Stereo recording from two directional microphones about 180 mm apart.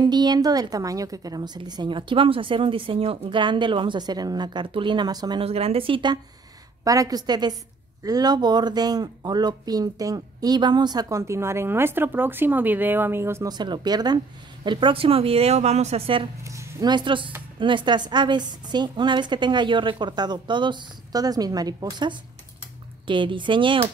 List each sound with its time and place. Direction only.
0.0 s speech: 25° right (ahead or behind)
5.4 s speech: 35° right (ahead or behind)
16.4 s speech: 15° right (ahead or behind)